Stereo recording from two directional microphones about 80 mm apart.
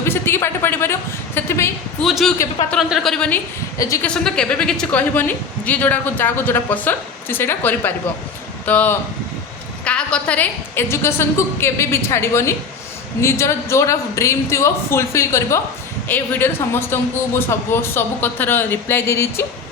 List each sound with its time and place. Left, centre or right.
0.0 s a man's voice: left
2.0 s a woman's voice: centre
3.8 s a man's voice: left
4.0 s a woman's voice: centre
10.8 s a man's voice: left
16.0 s speech: left